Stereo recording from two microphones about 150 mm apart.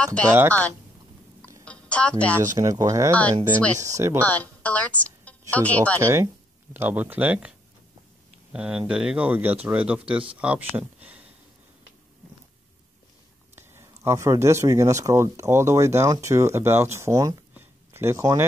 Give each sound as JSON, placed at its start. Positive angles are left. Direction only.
{"t": 0.0, "sound": "a woman's voice", "side_deg": 10}
{"t": 0.4, "sound": "speech", "side_deg": -20}
{"t": 1.6, "sound": "music", "side_deg": 10}
{"t": 2.5, "sound": "speech", "side_deg": -20}
{"t": 4.2, "sound": "a woman's voice", "side_deg": 10}
{"t": 5.9, "sound": "speech", "side_deg": -20}
{"t": 8.5, "sound": "speech", "side_deg": -5}
{"t": 13.6, "sound": "speech", "side_deg": -15}